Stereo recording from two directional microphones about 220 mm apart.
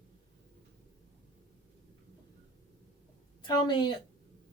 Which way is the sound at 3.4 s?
20° left (ahead or behind).